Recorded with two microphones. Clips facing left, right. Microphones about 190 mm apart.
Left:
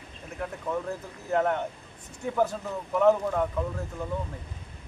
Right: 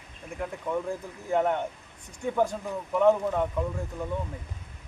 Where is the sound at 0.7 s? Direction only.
10° right (ahead or behind).